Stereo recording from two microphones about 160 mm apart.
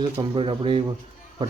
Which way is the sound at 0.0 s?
30° right (ahead or behind).